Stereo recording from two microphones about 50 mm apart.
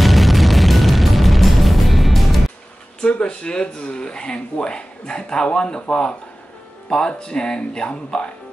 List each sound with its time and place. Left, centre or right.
0.0 s music: centre
3.1 s speech: left